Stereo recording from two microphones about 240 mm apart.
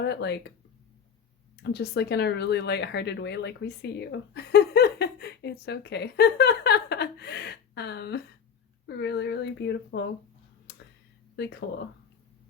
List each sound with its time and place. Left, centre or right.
0.0 s speech: left
1.6 s speech: left
10.7 s a sound: left